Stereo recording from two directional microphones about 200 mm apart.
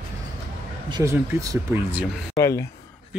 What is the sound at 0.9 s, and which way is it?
Speech, 15° right (ahead or behind).